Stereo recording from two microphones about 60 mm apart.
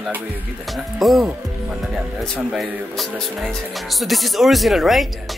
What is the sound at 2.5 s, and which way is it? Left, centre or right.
Speech, centre.